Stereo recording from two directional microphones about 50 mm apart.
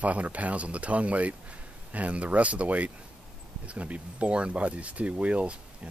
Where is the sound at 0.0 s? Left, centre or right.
Right.